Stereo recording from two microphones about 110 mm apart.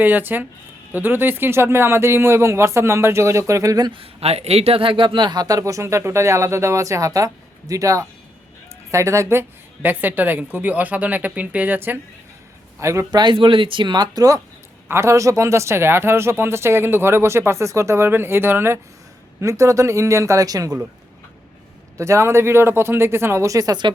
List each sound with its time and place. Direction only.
0.0 s a woman's voice: 15° right (ahead or behind); by 3.9 s 35° right (ahead or behind)
3.9 s a woman's voice: 65° right (ahead or behind); by 13.1 s 25° right (ahead or behind)
13.1 s speech: 40° right (ahead or behind)
13.3 s speech: 50° right (ahead or behind); by 20.7 s 35° right (ahead or behind)
21.9 s speech: 25° right (ahead or behind)